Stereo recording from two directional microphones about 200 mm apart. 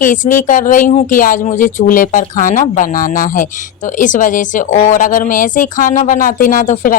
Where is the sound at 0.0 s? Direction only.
40° left (ahead or behind).